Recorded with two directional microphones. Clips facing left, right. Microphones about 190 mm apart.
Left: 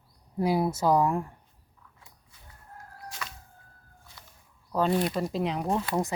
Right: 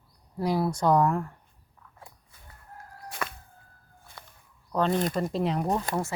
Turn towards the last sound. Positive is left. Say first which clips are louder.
# left 2 dB
turn(degrees=15)  # may be behind; listen again after turning